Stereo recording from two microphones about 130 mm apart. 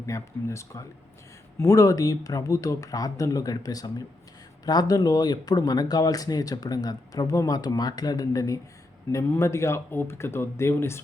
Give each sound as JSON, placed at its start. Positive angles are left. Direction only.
{"t": 0.0, "sound": "speech", "side_deg": 20}